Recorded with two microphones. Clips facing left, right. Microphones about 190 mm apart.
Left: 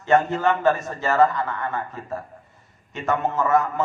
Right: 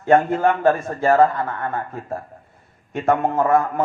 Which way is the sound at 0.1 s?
55° right (ahead or behind).